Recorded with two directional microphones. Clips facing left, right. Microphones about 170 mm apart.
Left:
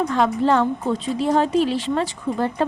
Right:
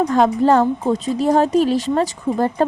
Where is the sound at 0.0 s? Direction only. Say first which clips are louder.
Right 4 dB; 40° right (ahead or behind).